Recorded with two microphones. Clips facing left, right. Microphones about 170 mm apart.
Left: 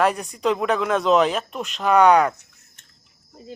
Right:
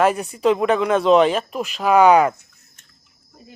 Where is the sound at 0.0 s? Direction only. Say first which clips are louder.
Right 3 dB; centre (ahead or behind).